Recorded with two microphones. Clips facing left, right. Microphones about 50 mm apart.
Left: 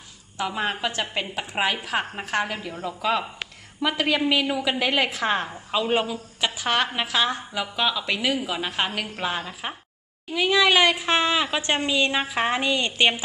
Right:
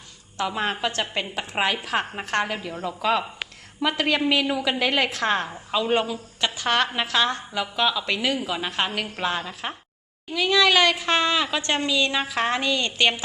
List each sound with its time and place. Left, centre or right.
0.3 s a woman's voice: centre
10.3 s a woman's voice: centre